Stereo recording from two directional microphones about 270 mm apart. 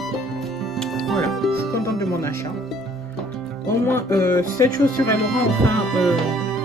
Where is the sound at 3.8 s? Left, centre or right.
Centre.